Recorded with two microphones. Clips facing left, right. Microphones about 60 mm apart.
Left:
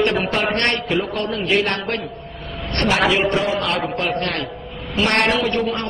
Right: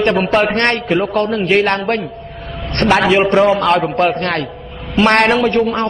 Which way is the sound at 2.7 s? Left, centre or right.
Right.